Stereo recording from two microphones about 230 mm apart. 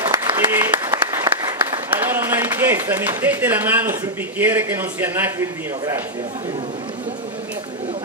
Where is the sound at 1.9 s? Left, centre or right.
Centre.